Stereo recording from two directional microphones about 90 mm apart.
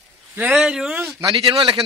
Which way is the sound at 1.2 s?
65° right (ahead or behind).